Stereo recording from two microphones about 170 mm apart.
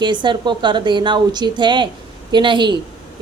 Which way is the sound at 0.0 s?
25° right (ahead or behind).